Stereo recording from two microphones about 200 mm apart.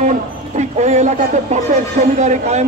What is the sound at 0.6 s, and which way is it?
A man's voice, 35° right (ahead or behind).